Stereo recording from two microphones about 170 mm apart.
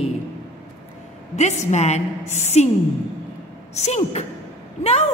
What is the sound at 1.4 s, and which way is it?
A woman's voice, 40° left (ahead or behind).